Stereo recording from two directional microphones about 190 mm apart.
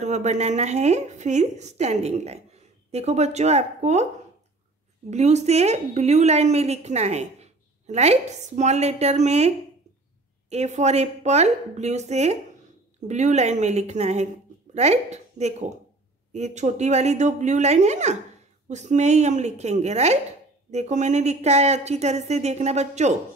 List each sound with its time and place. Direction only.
0.0 s a woman's voice: 35° right (ahead or behind)
5.1 s a woman's voice: 35° right (ahead or behind)
10.5 s a woman's voice: 35° right (ahead or behind)